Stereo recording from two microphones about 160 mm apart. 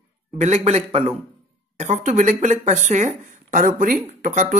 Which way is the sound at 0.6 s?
40° right (ahead or behind).